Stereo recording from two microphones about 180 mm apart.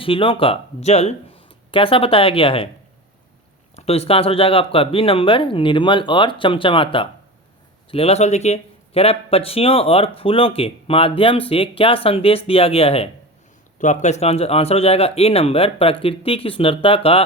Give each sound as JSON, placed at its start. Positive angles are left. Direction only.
{"t": 0.0, "sound": "speech", "side_deg": 30}
{"t": 3.8, "sound": "speech", "side_deg": 35}